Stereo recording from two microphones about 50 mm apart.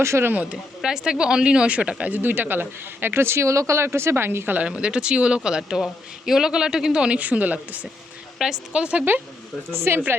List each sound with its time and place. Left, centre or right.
0.0 s speech: right
0.5 s speech: centre
2.1 s speech: right
4.5 s speech: right
7.2 s a woman's voice: right
8.4 s speech: centre
8.7 s a woman's voice: right
9.9 s speech: right